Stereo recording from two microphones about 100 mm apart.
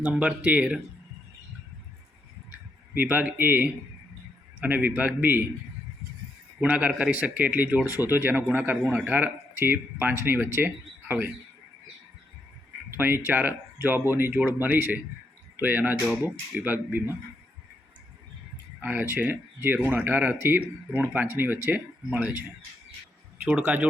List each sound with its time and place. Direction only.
0.0 s speech: 10° right (ahead or behind)
2.9 s speech: 20° right (ahead or behind)
6.6 s speech: 15° right (ahead or behind)
12.9 s speech: 25° right (ahead or behind)
18.8 s speech: 20° right (ahead or behind)
23.4 s speech: 15° right (ahead or behind)